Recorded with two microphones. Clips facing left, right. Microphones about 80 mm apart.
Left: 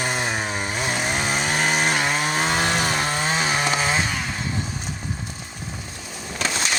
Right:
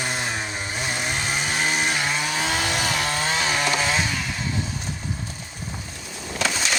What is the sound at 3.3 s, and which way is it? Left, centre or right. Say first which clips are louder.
Chainsaw: even; left.